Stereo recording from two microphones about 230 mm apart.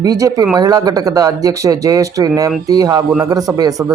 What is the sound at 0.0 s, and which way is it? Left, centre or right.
Speech, centre.